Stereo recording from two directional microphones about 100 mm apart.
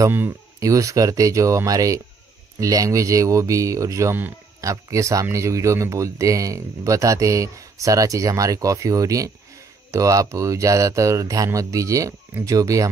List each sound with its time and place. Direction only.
0.6 s speech: 35° right (ahead or behind)